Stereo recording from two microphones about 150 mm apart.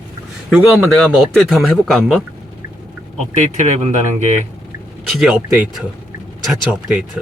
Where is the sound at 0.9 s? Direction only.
5° left (ahead or behind).